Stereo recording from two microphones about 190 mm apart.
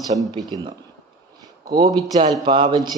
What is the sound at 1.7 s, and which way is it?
Speech, 20° right (ahead or behind).